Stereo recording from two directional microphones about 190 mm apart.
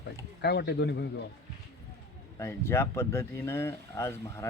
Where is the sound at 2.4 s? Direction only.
15° left (ahead or behind).